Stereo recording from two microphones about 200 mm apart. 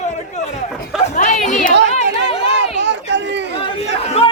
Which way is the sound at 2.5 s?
60° right (ahead or behind).